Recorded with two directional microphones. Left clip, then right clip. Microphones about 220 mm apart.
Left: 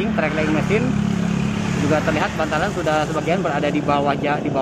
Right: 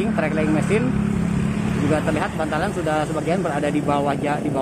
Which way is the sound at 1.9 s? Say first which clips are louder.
Left 3 dB; 5° right (ahead or behind).